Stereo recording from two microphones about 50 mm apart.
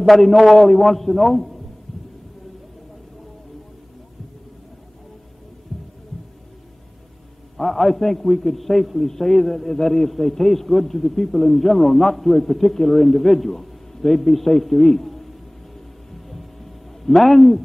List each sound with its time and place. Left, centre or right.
0.0 s a man's voice: centre
5.7 s heart sounds: centre
7.5 s a man's voice: centre
17.0 s a man's voice: centre